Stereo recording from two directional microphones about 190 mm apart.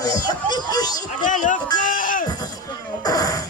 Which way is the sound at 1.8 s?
45° left (ahead or behind).